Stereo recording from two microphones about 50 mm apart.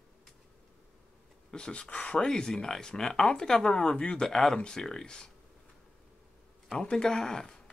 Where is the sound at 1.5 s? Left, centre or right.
Centre.